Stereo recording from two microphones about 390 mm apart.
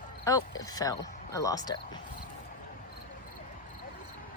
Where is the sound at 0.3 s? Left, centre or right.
Centre.